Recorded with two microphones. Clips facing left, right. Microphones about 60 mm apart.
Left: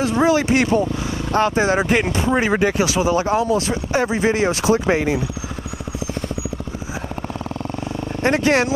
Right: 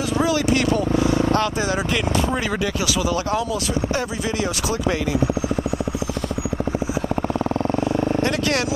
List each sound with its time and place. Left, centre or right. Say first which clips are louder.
0.2 s speech: left 3 dB; left
0.9 s vehicle: right 7 dB; right
1.3 s speech: left 4 dB; left
8.2 s speech: left 4 dB; left